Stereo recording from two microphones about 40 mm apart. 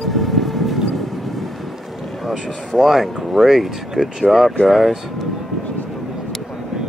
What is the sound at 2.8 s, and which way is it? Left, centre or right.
Speech, centre.